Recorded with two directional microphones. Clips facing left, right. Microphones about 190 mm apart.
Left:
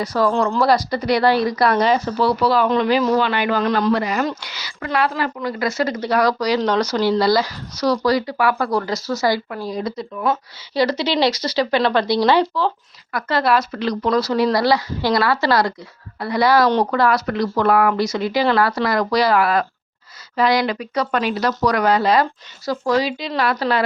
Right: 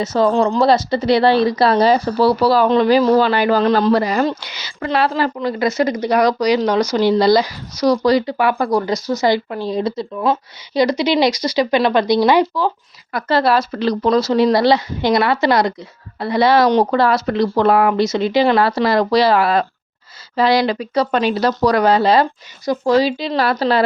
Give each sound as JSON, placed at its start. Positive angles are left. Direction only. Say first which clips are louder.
{"t": 0.0, "sound": "a woman's voice", "louder": "right 3 dB", "side_deg": -25}
{"t": 10.8, "sound": "speech", "louder": "right 3 dB", "side_deg": -15}
{"t": 13.1, "sound": "a woman's voice", "louder": "right 3 dB", "side_deg": -30}